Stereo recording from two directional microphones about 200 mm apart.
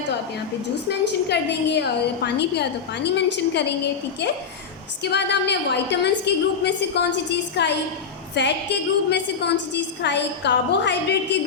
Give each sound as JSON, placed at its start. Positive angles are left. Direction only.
{"t": 0.9, "sound": "a woman's voice", "side_deg": 60}
{"t": 5.0, "sound": "a woman's voice", "side_deg": 55}